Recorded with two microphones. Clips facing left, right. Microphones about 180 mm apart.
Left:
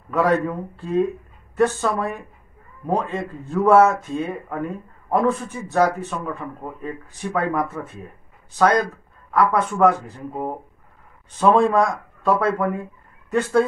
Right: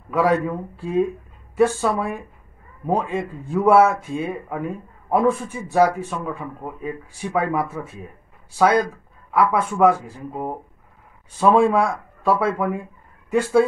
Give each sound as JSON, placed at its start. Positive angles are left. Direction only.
{"t": 0.1, "sound": "speech", "side_deg": -5}